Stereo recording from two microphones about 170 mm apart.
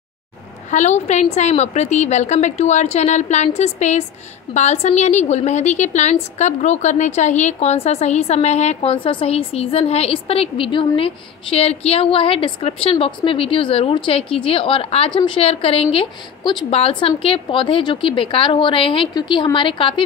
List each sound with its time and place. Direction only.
0.7 s a woman's voice: 45° left (ahead or behind)